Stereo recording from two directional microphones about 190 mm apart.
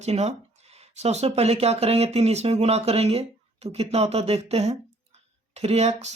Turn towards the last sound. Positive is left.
turn(degrees=-35)  # may be behind; listen again after turning